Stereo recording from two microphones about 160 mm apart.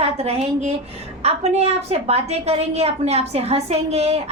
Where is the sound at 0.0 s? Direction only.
40° right (ahead or behind).